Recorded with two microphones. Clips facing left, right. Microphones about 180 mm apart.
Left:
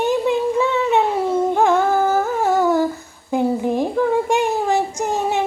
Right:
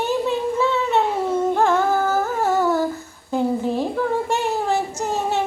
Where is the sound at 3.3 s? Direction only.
15° left (ahead or behind).